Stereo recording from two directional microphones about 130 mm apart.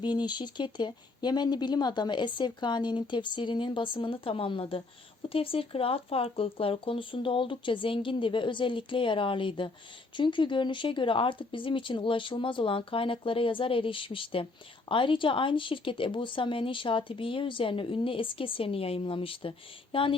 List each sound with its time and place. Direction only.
0.0 s speech: 35° left (ahead or behind)